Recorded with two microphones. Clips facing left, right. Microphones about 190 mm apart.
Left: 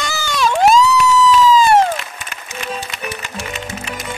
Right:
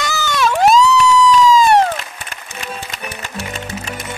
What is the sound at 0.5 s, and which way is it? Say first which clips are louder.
Police car: even; centre (ahead or behind).